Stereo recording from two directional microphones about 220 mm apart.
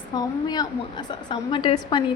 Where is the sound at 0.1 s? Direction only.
20° left (ahead or behind).